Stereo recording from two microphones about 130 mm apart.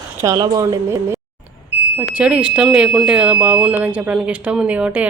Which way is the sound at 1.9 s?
10° right (ahead or behind).